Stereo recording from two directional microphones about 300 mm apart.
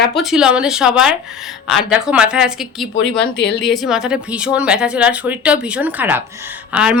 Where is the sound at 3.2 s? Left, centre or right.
Left.